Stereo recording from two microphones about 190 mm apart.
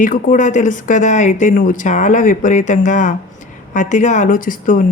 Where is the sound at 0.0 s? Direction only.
45° left (ahead or behind).